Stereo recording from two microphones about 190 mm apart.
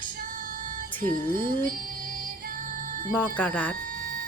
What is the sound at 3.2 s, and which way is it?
Speech, 10° left (ahead or behind).